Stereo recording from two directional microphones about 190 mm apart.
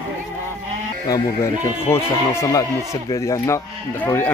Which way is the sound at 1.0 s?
15° left (ahead or behind).